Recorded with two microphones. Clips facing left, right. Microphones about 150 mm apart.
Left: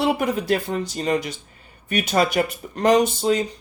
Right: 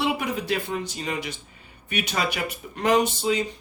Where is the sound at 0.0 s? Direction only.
45° left (ahead or behind).